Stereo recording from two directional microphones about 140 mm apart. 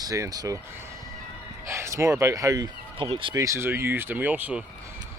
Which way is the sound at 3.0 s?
40° right (ahead or behind).